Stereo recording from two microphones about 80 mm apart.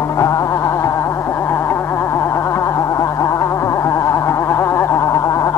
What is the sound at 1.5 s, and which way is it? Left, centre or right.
Gargling, left.